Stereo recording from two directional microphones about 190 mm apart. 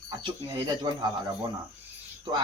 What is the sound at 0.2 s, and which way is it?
Speech, 25° right (ahead or behind).